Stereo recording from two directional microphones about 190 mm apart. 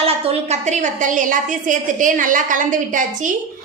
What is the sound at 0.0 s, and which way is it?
A woman's voice, 35° right (ahead or behind).